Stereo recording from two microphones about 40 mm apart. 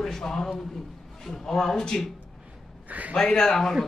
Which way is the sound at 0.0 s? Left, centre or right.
Centre.